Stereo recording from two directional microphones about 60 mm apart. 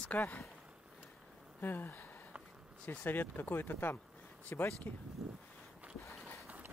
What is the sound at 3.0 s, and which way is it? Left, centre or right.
Speech, left.